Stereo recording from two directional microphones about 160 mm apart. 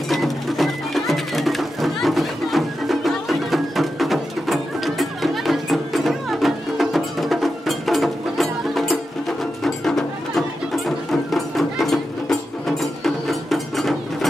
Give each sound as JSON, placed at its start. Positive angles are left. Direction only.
{"t": 0.1, "sound": "music", "side_deg": 0}